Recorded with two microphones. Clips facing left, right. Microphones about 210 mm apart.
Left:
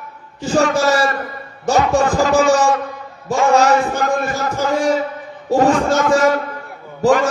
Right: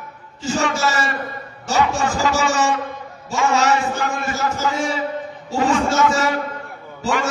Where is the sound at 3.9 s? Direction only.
55° left (ahead or behind).